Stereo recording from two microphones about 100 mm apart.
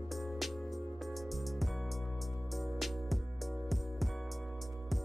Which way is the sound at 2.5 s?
Centre (ahead or behind).